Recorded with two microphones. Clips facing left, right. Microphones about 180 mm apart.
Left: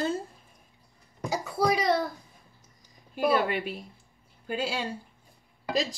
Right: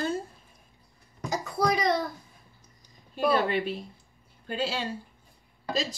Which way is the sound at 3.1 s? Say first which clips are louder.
Even; 10° left (ahead or behind).